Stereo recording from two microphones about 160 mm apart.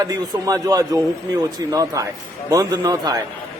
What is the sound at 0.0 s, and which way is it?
Speech, 20° right (ahead or behind).